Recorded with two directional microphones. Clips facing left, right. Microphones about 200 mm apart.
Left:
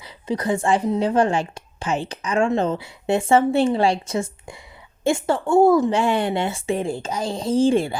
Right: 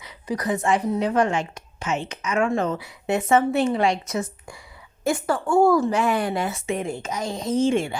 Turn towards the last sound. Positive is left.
turn(degrees=35)  # may be behind; listen again after turning